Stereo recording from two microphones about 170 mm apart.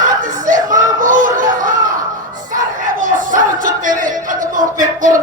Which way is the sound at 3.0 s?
50° right (ahead or behind).